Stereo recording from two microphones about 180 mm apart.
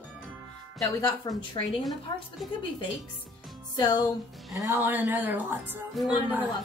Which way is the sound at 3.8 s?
20° left (ahead or behind).